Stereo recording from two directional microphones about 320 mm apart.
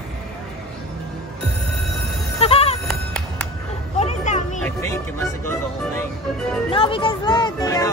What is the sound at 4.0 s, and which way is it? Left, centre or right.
Music, left.